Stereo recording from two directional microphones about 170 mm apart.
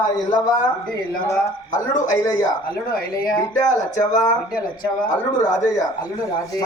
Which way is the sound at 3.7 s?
45° left (ahead or behind).